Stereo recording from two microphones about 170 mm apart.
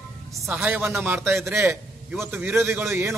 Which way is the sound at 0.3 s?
10° right (ahead or behind).